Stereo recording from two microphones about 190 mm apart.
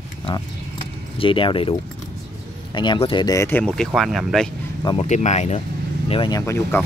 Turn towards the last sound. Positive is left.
turn(degrees=15)  # may be behind; listen again after turning